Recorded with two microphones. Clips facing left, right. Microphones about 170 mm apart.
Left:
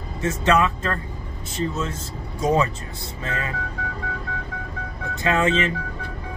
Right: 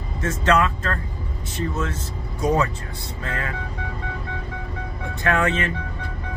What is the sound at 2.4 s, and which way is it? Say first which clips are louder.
Speech: left 1 dB; 20° left (ahead or behind).